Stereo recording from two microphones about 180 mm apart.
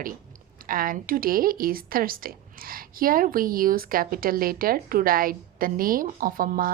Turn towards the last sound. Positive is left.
turn(degrees=-50)  # may be behind; listen again after turning